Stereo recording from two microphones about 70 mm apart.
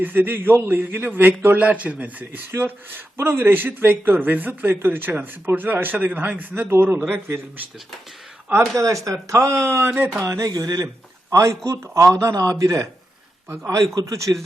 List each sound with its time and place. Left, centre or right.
0.0 s a man's voice: right
8.7 s speech: right
10.2 s speech: right